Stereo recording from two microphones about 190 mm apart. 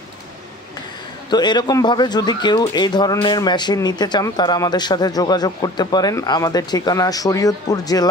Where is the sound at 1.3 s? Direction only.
20° left (ahead or behind).